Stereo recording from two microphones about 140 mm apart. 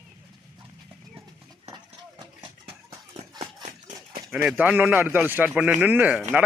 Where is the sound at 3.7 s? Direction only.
75° right (ahead or behind).